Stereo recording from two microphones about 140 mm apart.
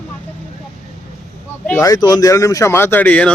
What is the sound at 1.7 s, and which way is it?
Speech, 25° left (ahead or behind).